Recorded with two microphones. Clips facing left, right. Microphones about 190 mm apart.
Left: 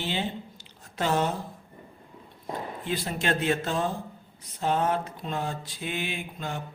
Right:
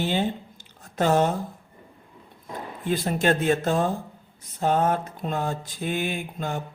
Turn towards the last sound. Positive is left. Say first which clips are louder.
# right 4 dB
turn(degrees=-45)  # may be behind; listen again after turning